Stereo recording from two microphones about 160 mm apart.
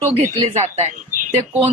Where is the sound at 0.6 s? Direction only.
45° right (ahead or behind).